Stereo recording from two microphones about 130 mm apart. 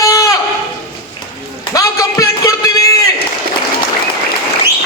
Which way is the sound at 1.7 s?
25° left (ahead or behind).